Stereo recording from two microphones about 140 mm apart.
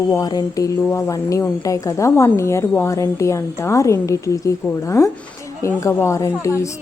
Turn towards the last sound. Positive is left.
turn(degrees=20)  # may be behind; listen again after turning